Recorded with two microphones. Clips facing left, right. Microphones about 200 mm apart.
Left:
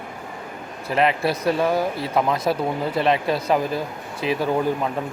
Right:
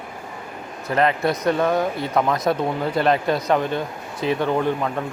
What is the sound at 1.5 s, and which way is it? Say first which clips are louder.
Speech: right 1 dB; 5° left (ahead or behind).